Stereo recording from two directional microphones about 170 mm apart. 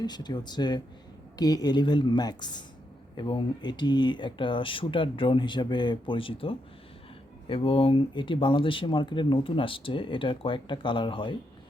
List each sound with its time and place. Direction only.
0.0 s speech: 25° left (ahead or behind)